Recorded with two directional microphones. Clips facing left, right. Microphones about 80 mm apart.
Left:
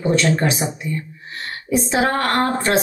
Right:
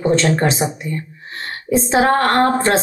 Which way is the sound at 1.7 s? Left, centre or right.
Right.